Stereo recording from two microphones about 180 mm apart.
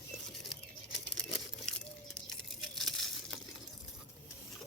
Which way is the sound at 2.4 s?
Centre (ahead or behind).